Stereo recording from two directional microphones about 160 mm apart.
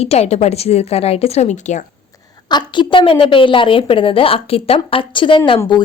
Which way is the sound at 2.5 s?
30° left (ahead or behind).